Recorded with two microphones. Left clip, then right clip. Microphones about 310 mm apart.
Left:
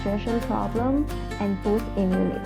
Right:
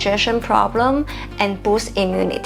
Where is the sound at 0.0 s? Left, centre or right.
Centre.